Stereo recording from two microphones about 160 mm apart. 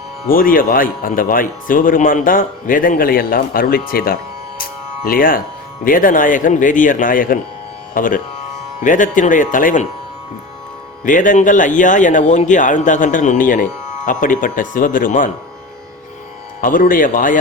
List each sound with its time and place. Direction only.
0.3 s speech: 60° left (ahead or behind)
11.0 s speech: 55° left (ahead or behind)
16.6 s speech: 60° left (ahead or behind)